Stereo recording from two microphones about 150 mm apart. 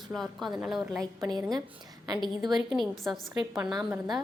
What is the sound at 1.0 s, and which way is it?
Speech, 25° right (ahead or behind).